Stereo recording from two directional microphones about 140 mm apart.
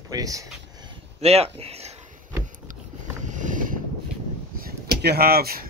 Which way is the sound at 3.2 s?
65° right (ahead or behind).